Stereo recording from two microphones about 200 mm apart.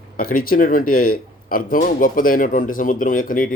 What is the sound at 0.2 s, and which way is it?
Speech, 45° left (ahead or behind).